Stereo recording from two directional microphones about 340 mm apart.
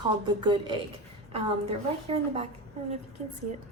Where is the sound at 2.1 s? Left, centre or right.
Centre.